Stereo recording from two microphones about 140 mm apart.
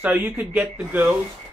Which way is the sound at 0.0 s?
10° right (ahead or behind).